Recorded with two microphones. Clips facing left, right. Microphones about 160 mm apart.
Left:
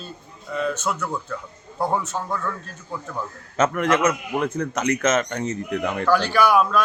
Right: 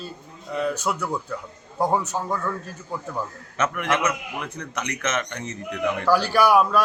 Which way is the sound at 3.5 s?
45° left (ahead or behind).